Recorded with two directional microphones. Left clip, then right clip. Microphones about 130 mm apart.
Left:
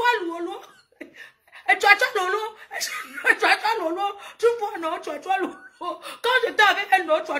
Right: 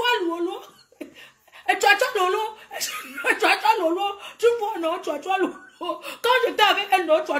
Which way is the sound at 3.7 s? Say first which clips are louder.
Right 3 dB; 40° left (ahead or behind).